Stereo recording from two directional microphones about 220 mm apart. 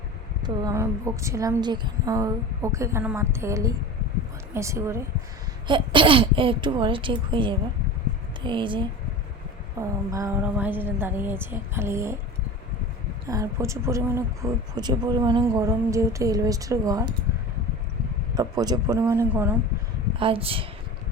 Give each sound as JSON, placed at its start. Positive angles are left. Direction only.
{"t": 0.4, "sound": "speech", "side_deg": -15}
{"t": 13.2, "sound": "speech", "side_deg": -15}
{"t": 18.3, "sound": "speech", "side_deg": -15}
{"t": 20.1, "sound": "speech", "side_deg": -25}